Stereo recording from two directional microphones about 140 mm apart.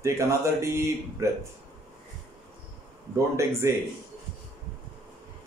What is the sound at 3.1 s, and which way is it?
Speech, 20° right (ahead or behind).